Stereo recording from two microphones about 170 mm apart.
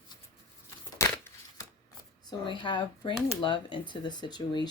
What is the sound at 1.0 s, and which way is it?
Crumpling, 20° left (ahead or behind).